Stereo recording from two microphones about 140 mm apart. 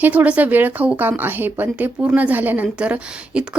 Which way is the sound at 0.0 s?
10° right (ahead or behind).